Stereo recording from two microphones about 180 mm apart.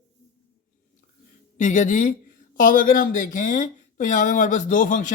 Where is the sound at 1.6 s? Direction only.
45° left (ahead or behind).